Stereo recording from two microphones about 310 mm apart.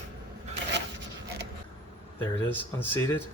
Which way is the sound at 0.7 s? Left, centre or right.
Right.